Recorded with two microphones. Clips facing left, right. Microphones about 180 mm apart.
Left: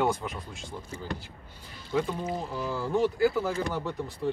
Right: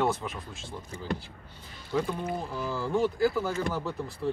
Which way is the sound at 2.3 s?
Centre (ahead or behind).